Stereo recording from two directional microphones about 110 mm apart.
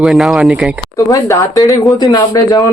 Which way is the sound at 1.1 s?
30° left (ahead or behind).